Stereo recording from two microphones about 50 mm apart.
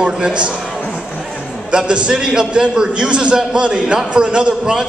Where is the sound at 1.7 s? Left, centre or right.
Centre.